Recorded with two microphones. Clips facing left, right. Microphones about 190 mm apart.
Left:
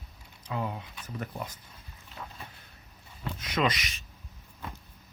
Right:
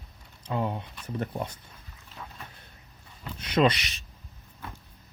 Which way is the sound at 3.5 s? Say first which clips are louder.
Right 6 dB; 30° right (ahead or behind).